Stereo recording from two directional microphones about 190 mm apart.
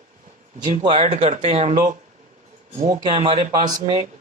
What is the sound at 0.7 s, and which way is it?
A man's voice, 30° right (ahead or behind).